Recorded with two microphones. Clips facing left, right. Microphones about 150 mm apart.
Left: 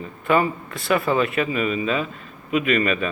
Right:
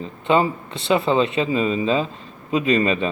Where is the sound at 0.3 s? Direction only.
25° right (ahead or behind).